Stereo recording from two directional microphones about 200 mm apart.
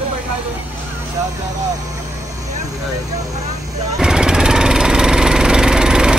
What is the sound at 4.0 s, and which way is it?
Jackhammer, 5° right (ahead or behind).